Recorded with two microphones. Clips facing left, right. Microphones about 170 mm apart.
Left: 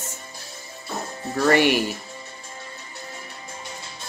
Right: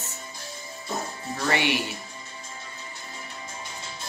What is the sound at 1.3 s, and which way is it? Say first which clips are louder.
Speech: left 8 dB; 50° left (ahead or behind).